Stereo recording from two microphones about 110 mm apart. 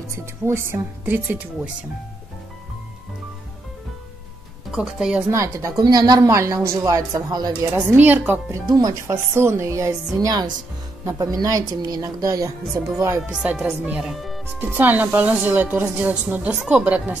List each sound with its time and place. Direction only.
0.1 s a woman's voice: 25° right (ahead or behind)
4.6 s speech: 5° right (ahead or behind)
5.3 s speech: 30° right (ahead or behind)
7.7 s a woman's voice: 15° right (ahead or behind)
8.6 s speech: 35° right (ahead or behind)
9.0 s a woman's voice: 20° right (ahead or behind)
13.3 s a woman's voice: 10° right (ahead or behind)
14.7 s a woman's voice: 15° right (ahead or behind)